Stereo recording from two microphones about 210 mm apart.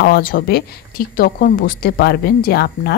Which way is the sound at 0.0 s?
45° left (ahead or behind).